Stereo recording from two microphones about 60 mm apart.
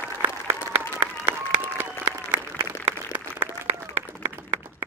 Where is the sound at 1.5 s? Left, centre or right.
Right.